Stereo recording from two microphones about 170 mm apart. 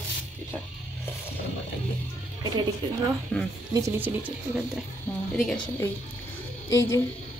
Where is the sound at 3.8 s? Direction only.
15° right (ahead or behind).